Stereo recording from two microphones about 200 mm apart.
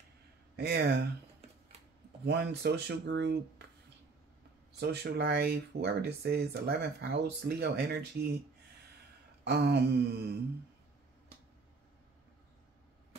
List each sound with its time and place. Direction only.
0.6 s speech: 55° right (ahead or behind)
2.2 s speech: 55° right (ahead or behind)
4.7 s speech: 55° right (ahead or behind)
9.4 s speech: 55° right (ahead or behind)